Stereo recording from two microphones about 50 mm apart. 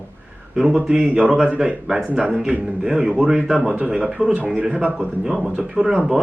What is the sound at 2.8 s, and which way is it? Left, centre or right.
Speech, centre.